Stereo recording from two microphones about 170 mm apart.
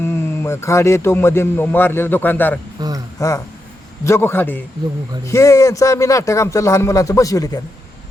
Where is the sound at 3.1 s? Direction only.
15° left (ahead or behind).